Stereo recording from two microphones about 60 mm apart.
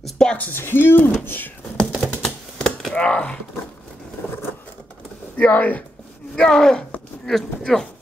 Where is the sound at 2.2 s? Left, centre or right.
Centre.